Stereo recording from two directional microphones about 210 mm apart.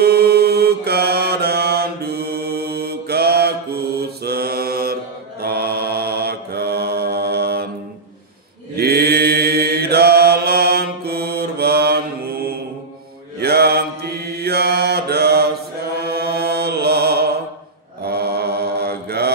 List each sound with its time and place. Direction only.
0.0 s mantra: 50° right (ahead or behind)
8.7 s mantra: 50° right (ahead or behind)